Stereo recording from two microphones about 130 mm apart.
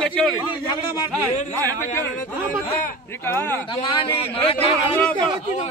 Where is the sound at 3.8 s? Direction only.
40° left (ahead or behind).